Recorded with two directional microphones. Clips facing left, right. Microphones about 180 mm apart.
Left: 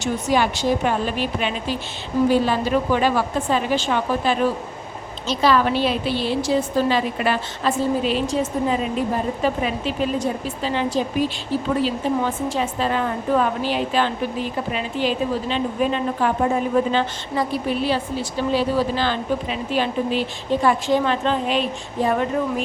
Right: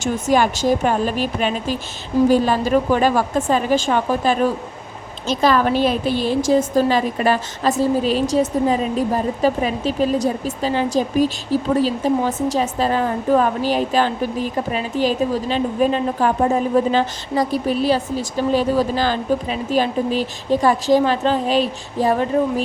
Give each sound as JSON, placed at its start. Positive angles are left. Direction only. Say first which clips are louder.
{"t": 0.0, "sound": "a woman's voice", "louder": "right 3 dB", "side_deg": -45}